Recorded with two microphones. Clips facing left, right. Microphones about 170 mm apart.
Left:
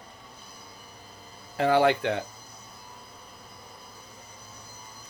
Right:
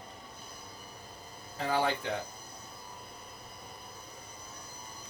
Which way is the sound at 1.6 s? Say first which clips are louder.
Left 9 dB; 75° left (ahead or behind).